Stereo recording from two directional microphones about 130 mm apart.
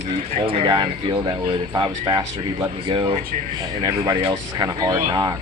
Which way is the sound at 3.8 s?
25° right (ahead or behind).